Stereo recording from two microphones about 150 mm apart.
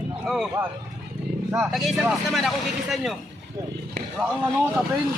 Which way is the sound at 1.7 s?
Centre (ahead or behind).